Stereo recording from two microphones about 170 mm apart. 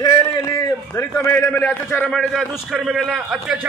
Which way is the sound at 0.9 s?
15° left (ahead or behind).